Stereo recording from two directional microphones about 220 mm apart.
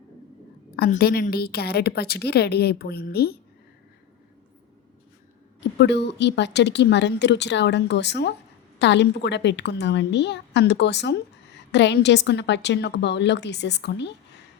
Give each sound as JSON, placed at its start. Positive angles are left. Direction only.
{"t": 0.8, "sound": "a woman's voice", "side_deg": 45}
{"t": 5.5, "sound": "a woman's voice", "side_deg": 50}